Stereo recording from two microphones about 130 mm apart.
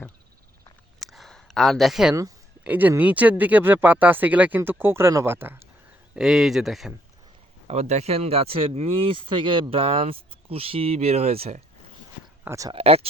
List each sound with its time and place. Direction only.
0.9 s a sound: centre (ahead or behind)
2.6 s speech: 15° right (ahead or behind)
6.1 s speech: 5° right (ahead or behind)
7.7 s speech: 55° right (ahead or behind)
12.5 s speech: 25° right (ahead or behind)
12.7 s speech: 50° right (ahead or behind)